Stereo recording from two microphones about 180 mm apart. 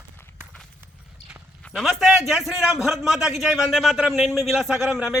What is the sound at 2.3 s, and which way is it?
Speech, centre (ahead or behind).